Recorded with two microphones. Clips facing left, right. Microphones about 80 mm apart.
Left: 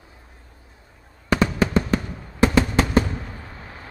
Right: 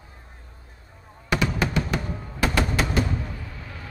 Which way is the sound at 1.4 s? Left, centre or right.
Left.